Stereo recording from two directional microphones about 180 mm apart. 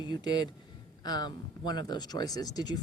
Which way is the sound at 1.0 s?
20° left (ahead or behind).